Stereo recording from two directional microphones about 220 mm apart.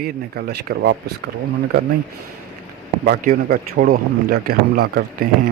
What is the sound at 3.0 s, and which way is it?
A man's voice, 40° right (ahead or behind).